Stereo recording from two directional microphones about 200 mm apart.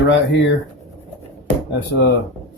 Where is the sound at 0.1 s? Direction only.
65° left (ahead or behind).